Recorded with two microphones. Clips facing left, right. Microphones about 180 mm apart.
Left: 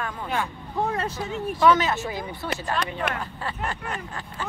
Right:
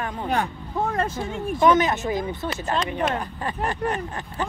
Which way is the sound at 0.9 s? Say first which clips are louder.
Right 3 dB; 50° right (ahead or behind).